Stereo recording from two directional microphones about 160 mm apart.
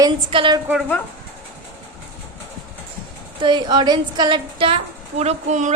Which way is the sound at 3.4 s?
30° right (ahead or behind).